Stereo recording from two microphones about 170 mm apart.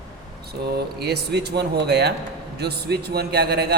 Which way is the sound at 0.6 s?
70° right (ahead or behind).